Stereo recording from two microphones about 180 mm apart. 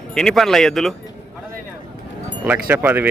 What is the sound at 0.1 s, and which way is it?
Speech, 5° left (ahead or behind).